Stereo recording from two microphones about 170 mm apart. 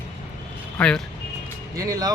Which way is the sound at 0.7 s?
5° left (ahead or behind).